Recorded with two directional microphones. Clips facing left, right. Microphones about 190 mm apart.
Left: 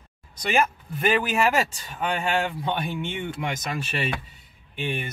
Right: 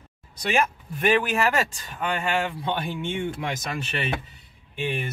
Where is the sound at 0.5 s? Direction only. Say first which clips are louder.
Left 1 dB; centre (ahead or behind).